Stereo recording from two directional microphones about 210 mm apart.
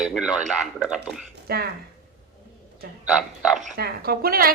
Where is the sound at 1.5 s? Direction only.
45° right (ahead or behind).